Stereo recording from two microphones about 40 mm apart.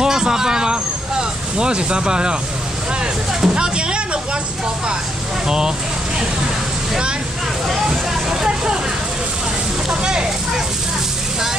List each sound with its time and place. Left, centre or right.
0.0 s vehicle: centre
3.4 s speech: right
7.6 s vehicle: centre